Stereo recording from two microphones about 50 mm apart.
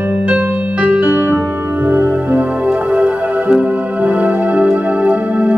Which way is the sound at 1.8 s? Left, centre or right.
Right.